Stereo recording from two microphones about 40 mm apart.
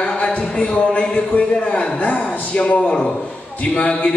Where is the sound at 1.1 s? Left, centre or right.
Left.